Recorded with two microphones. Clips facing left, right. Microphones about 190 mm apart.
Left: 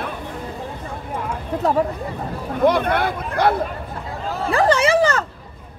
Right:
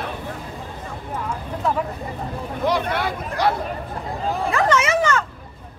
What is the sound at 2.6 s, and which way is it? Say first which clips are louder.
Speech: left 5 dB; 55° left (ahead or behind).